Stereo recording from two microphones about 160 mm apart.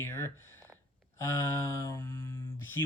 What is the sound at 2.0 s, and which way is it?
Speech, 15° left (ahead or behind).